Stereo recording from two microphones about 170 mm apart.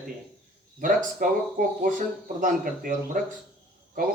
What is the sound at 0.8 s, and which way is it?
Speech, 55° right (ahead or behind).